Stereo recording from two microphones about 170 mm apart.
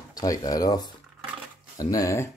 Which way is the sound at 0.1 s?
20° left (ahead or behind).